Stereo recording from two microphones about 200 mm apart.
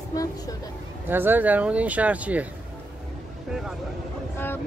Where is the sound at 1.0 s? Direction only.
10° right (ahead or behind).